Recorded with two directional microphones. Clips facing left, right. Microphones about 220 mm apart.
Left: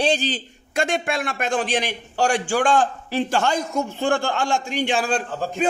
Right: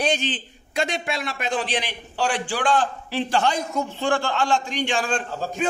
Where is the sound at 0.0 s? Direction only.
35° left (ahead or behind).